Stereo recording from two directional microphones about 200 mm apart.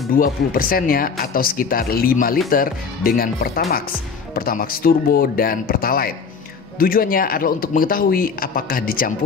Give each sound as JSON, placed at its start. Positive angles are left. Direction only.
{"t": 0.1, "sound": "speech", "side_deg": 45}